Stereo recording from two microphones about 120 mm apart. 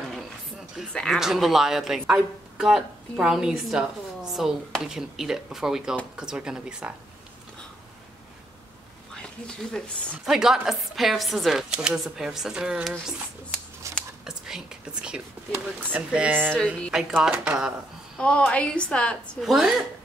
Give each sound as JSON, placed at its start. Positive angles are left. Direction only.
{"t": 0.9, "sound": "a woman's voice", "side_deg": 5}
{"t": 9.8, "sound": "speech", "side_deg": 5}
{"t": 13.9, "sound": "a sound", "side_deg": -25}
{"t": 14.2, "sound": "whispering", "side_deg": -5}
{"t": 15.5, "sound": "speech", "side_deg": -10}
{"t": 18.1, "sound": "a woman's voice", "side_deg": 10}
{"t": 19.4, "sound": "speech", "side_deg": 0}